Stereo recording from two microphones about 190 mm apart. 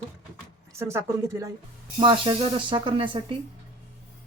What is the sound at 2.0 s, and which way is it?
Speech, 25° right (ahead or behind).